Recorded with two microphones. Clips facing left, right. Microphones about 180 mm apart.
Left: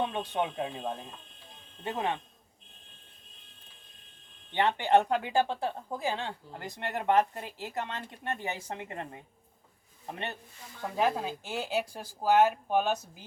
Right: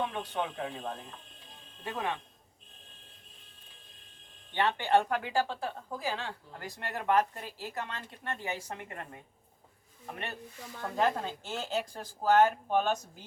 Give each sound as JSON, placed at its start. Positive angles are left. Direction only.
{"t": 0.1, "sound": "speech", "side_deg": 20}
{"t": 4.5, "sound": "speech", "side_deg": 20}
{"t": 10.1, "sound": "speech", "side_deg": 25}
{"t": 10.8, "sound": "speech", "side_deg": 10}